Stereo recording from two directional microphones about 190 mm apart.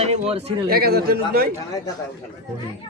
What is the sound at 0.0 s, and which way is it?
Speech, 35° right (ahead or behind).